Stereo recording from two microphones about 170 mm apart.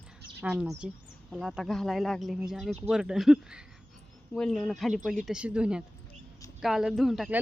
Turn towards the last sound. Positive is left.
turn(degrees=0)  # may be behind; listen again after turning